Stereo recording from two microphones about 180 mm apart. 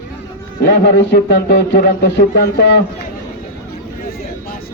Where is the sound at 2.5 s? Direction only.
75° left (ahead or behind).